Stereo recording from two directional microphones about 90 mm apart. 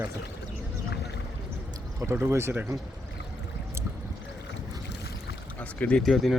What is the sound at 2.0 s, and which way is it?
Speech, 25° right (ahead or behind).